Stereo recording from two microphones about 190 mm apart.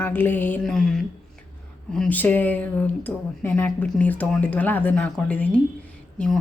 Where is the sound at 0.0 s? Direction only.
10° left (ahead or behind).